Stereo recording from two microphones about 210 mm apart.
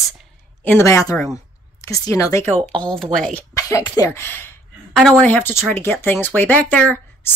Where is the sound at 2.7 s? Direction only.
5° left (ahead or behind).